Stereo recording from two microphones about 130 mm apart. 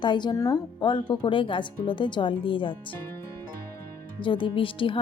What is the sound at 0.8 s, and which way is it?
Speech, 35° left (ahead or behind).